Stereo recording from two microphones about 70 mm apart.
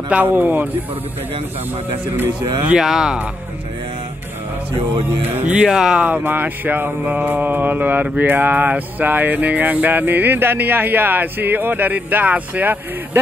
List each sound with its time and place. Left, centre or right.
0.3 s mantra: right
2.8 s speech: centre
5.2 s mantra: right
5.6 s speech: centre
6.2 s mantra: right